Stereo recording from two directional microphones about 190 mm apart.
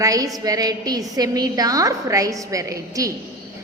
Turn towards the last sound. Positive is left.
turn(degrees=-15)  # may be behind; listen again after turning